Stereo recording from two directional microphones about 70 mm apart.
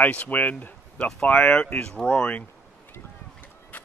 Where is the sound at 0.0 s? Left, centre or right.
Left.